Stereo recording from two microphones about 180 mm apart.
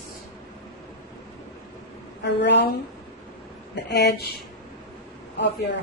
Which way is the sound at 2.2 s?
70° left (ahead or behind).